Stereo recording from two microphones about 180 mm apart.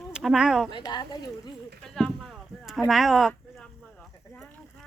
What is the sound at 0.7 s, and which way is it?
Speech, 25° left (ahead or behind).